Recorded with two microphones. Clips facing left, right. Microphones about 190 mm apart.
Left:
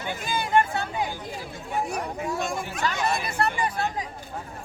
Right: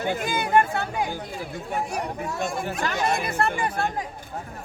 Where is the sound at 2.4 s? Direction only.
50° right (ahead or behind).